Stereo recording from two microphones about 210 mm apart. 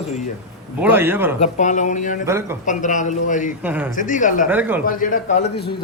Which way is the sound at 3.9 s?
40° left (ahead or behind).